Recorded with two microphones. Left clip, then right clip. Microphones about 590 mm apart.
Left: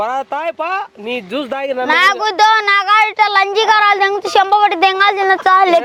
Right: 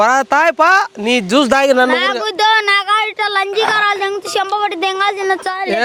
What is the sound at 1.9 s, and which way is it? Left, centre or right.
Speech, left.